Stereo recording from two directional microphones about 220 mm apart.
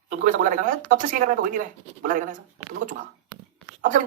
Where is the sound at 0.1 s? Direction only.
35° right (ahead or behind).